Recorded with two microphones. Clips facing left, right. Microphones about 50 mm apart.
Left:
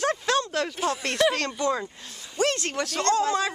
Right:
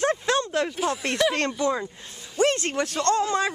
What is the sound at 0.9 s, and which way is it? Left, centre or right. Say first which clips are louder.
Speech: even; centre.